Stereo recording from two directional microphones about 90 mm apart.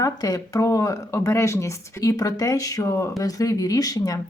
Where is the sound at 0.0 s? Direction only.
40° left (ahead or behind).